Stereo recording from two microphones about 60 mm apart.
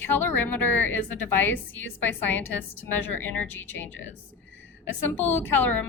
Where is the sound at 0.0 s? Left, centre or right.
Left.